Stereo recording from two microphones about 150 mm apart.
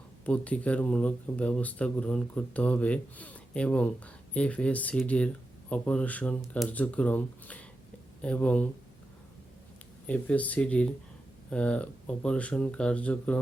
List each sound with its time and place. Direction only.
0.3 s speech: 10° left (ahead or behind)
10.1 s speech: 10° left (ahead or behind)